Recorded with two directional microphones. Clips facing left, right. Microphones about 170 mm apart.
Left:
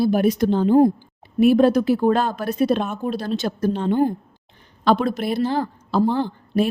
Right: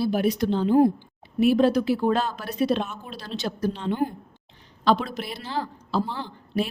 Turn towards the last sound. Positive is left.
turn(degrees=50)  # may be behind; listen again after turning